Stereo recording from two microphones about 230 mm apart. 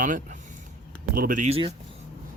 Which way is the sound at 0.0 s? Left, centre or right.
Right.